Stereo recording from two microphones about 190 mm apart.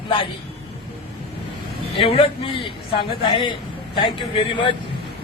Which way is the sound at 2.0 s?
30° left (ahead or behind).